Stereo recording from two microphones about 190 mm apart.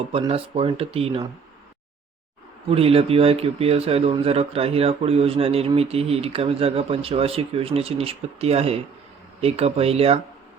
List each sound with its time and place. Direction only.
0.1 s speech: 30° right (ahead or behind)
2.6 s speech: 30° right (ahead or behind)